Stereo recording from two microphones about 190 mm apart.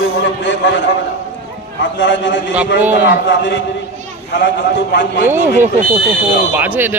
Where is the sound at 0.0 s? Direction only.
70° left (ahead or behind).